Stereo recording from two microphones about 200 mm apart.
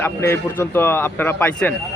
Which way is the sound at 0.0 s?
10° left (ahead or behind).